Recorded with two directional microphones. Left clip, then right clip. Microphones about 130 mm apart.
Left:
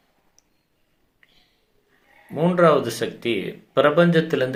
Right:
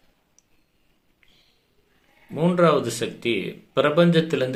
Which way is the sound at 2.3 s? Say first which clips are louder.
Left 2 dB; 25° right (ahead or behind).